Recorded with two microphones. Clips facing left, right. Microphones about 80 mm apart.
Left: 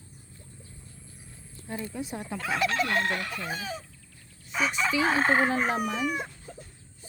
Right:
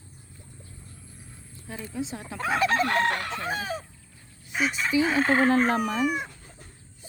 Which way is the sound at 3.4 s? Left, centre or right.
Right.